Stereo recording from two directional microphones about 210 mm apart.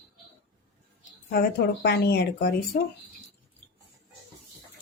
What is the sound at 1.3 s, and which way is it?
Speech, 50° left (ahead or behind).